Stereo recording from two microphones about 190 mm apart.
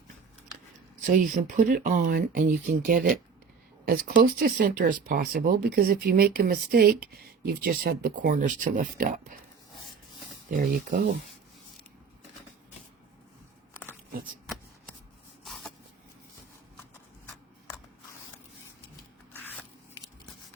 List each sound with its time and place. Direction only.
1.0 s speech: 45° right (ahead or behind)
10.5 s speech: 45° right (ahead or behind)
15.4 s vehicle: centre (ahead or behind)
19.3 s spray: 10° left (ahead or behind)